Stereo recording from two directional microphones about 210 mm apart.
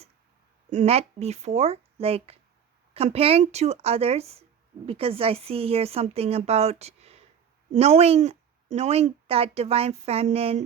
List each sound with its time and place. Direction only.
0.7 s speech: 30° right (ahead or behind)